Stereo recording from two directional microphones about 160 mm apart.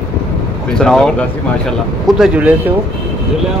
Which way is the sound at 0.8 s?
5° left (ahead or behind).